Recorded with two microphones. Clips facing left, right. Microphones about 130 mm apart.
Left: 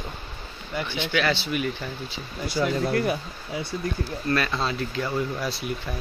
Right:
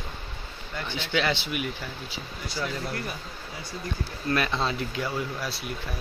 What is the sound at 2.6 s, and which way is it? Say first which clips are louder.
Speech: left 9 dB; 60° left (ahead or behind).